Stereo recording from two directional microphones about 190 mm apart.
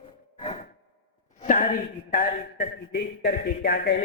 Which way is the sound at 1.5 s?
45° left (ahead or behind).